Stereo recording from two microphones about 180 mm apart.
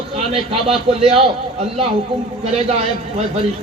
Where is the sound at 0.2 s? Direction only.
30° right (ahead or behind).